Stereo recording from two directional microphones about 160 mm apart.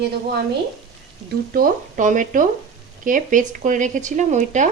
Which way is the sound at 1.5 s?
60° right (ahead or behind).